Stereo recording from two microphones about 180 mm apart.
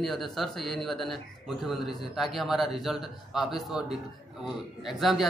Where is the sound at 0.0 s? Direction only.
Centre (ahead or behind).